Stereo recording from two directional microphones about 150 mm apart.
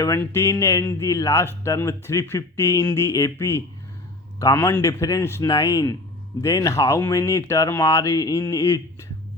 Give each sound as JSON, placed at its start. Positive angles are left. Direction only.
{"t": 0.2, "sound": "speech", "side_deg": 15}